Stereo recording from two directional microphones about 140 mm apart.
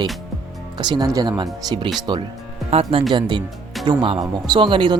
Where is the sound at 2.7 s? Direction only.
40° right (ahead or behind).